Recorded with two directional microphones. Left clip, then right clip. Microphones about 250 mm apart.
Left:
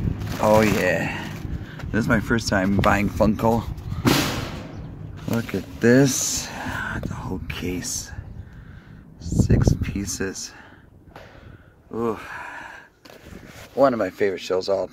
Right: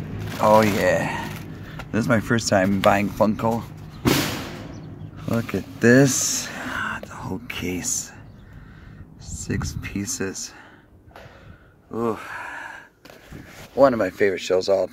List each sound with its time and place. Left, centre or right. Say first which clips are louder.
0.4 s speech: right 1 dB; centre
0.8 s speech: right 2 dB; centre
5.2 s speech: right 1 dB; centre
9.2 s speech: left 7 dB; centre
11.9 s a sound: even; centre
13.7 s speech: right 2 dB; centre